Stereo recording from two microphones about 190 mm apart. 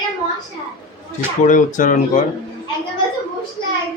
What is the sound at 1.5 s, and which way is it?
Speech, 45° left (ahead or behind).